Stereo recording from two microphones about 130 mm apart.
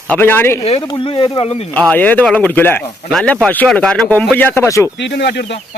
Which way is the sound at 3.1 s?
5° left (ahead or behind).